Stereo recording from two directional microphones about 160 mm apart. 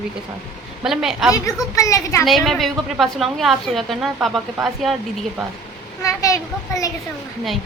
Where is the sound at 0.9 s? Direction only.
Centre (ahead or behind).